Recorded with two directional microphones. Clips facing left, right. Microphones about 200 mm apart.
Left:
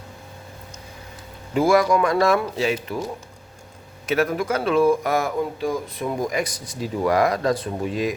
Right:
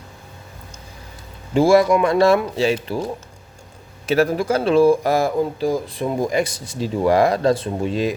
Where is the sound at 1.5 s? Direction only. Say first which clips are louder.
Right 4 dB; 25° right (ahead or behind).